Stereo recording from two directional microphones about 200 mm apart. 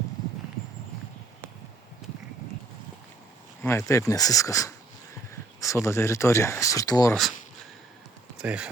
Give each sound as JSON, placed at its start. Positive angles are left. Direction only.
{"t": 3.6, "sound": "speech", "side_deg": 15}
{"t": 5.3, "sound": "a sound", "side_deg": 15}
{"t": 5.8, "sound": "speech", "side_deg": 15}
{"t": 7.1, "sound": "speech", "side_deg": 0}
{"t": 8.4, "sound": "speech", "side_deg": -5}